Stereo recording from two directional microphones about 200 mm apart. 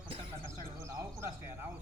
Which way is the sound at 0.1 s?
25° right (ahead or behind).